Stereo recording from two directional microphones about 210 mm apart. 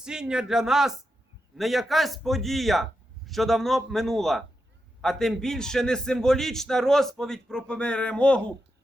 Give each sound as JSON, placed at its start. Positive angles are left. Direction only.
{"t": 0.0, "sound": "a man's voice", "side_deg": -5}